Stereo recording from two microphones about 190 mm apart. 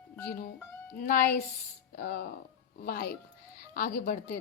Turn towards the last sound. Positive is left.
turn(degrees=50)  # may be behind; listen again after turning